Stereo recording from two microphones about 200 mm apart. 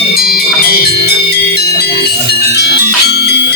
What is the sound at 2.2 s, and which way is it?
Music, 55° left (ahead or behind).